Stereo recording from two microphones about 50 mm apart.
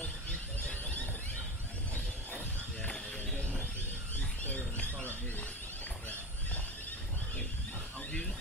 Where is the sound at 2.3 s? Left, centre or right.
Left.